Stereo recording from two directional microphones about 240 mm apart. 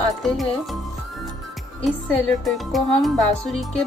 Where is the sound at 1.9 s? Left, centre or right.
Centre.